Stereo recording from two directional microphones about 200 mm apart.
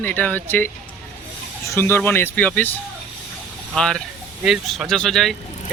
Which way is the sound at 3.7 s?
Centre (ahead or behind).